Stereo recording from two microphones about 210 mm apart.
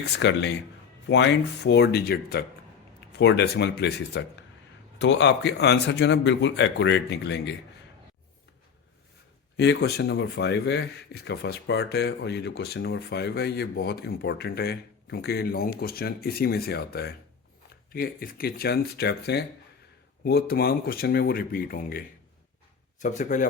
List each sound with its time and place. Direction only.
0.0 s a man's voice: 55° left (ahead or behind)
9.6 s speech: 55° left (ahead or behind); by 23.5 s 35° left (ahead or behind)